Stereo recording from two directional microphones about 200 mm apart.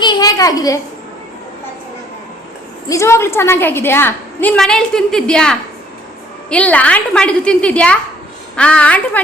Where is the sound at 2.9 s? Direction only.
15° left (ahead or behind).